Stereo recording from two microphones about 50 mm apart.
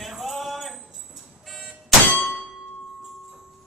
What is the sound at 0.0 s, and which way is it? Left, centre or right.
Music, centre.